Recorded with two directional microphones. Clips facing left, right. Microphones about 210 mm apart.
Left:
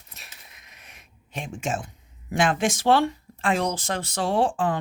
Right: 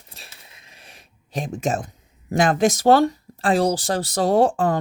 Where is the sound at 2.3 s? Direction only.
40° right (ahead or behind).